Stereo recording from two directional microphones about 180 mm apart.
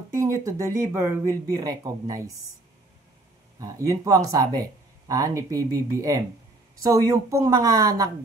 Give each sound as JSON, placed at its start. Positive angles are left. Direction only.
{"t": 0.1, "sound": "speech", "side_deg": -15}
{"t": 3.5, "sound": "speech", "side_deg": -20}